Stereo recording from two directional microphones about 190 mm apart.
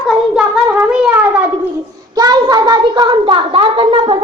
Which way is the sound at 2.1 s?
20° right (ahead or behind).